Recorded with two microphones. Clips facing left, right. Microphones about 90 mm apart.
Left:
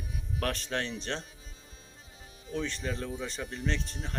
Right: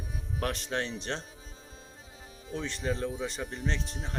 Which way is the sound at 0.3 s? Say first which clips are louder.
Even; 20° right (ahead or behind).